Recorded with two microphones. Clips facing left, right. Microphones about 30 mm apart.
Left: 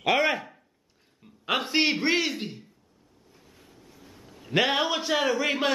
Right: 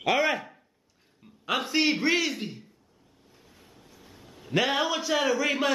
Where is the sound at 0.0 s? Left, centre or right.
Centre.